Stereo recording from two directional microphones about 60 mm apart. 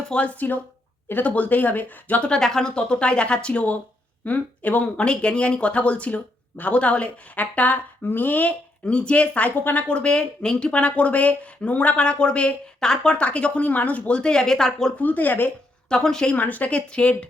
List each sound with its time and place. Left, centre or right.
0.1 s speech: left
2.2 s speech: centre
9.6 s speech: left
9.8 s speech: centre
14.2 s speech: centre
14.9 s speech: left
15.9 s speech: centre
16.3 s speech: left